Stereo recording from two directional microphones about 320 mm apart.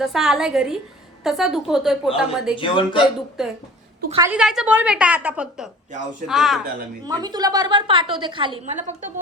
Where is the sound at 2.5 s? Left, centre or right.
Centre.